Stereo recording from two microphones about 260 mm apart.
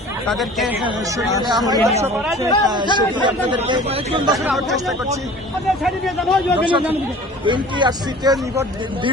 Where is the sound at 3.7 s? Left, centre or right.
Centre.